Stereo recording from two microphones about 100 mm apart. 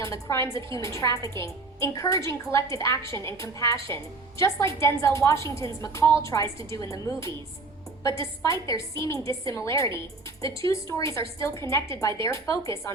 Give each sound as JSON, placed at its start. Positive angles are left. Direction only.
{"t": 0.0, "sound": "a woman's voice", "side_deg": 30}